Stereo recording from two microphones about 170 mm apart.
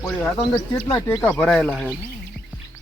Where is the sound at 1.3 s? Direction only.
5° left (ahead or behind).